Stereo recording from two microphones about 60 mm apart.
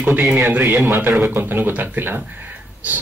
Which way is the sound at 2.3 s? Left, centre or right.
Right.